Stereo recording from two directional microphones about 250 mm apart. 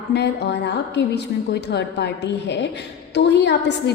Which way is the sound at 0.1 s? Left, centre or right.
Left.